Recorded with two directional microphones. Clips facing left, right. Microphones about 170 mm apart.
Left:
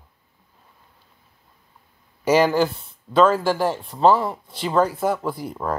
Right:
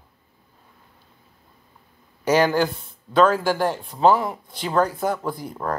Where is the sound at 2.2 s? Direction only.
5° left (ahead or behind).